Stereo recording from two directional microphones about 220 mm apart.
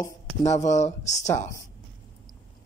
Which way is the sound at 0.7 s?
30° left (ahead or behind).